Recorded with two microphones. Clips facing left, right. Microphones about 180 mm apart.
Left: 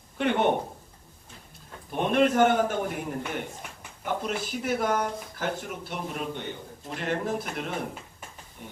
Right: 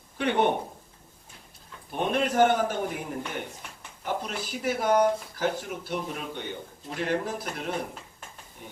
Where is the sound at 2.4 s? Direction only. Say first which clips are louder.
Even; 50° left (ahead or behind).